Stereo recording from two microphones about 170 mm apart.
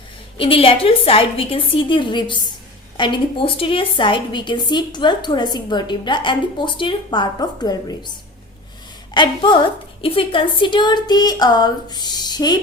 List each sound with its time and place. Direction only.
0.3 s a woman's voice: 30° left (ahead or behind)
9.1 s a woman's voice: 30° left (ahead or behind)